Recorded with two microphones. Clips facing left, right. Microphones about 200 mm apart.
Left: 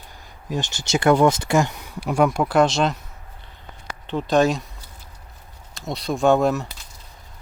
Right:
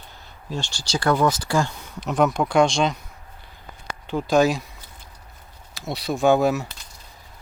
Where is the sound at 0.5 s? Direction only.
20° left (ahead or behind).